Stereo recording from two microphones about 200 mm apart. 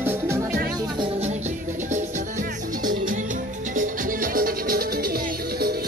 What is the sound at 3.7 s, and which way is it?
Music, 45° right (ahead or behind).